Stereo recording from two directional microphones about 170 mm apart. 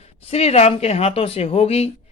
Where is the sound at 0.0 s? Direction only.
35° left (ahead or behind).